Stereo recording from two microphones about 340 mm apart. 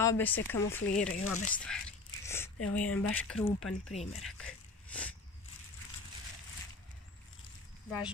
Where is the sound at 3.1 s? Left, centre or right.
Centre.